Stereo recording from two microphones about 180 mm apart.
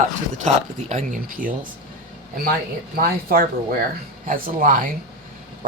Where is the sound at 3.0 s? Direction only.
55° right (ahead or behind).